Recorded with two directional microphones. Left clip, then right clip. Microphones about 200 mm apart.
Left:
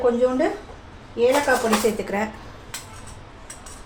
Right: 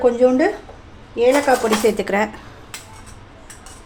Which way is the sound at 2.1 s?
50° right (ahead or behind).